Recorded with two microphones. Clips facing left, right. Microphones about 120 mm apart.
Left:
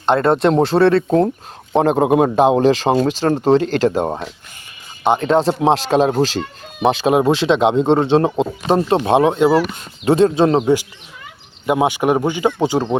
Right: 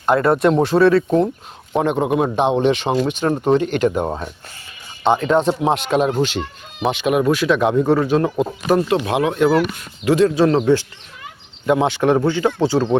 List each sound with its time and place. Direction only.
0.0 s a man's voice: 30° left (ahead or behind)
2.0 s a man's voice: 50° left (ahead or behind); by 4.1 s 30° left (ahead or behind)
5.3 s speech: 30° left (ahead or behind); by 13.0 s 15° left (ahead or behind)